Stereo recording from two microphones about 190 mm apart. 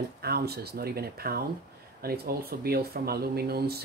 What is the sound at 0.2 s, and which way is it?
Speech, 55° right (ahead or behind).